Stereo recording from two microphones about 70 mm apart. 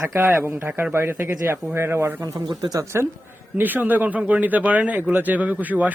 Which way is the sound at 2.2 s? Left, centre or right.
Right.